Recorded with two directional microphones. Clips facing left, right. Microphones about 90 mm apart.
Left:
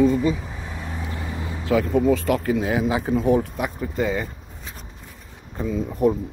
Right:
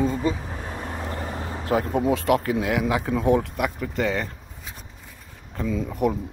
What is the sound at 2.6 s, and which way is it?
Speech, 60° right (ahead or behind).